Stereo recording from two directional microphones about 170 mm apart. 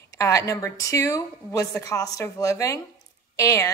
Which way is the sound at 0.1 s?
20° left (ahead or behind).